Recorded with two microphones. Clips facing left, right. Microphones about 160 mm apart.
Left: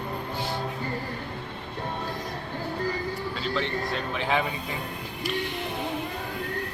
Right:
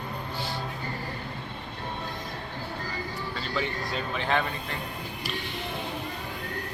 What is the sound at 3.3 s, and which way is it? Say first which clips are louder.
Speech: left 1 dB; centre (ahead or behind).